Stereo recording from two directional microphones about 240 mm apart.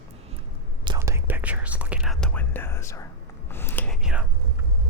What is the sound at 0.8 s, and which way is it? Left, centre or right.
Whispering, centre.